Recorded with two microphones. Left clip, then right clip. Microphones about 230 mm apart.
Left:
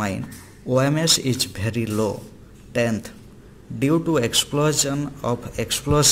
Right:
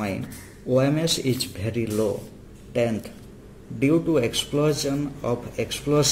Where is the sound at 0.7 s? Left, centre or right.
Left.